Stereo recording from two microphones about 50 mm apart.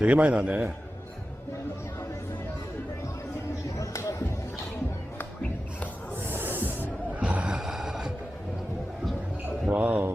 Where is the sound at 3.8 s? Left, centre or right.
Left.